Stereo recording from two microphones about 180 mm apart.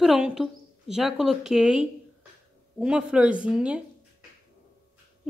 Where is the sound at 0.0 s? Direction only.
Centre (ahead or behind).